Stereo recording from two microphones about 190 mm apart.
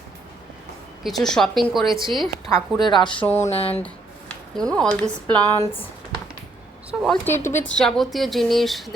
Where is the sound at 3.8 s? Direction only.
5° left (ahead or behind).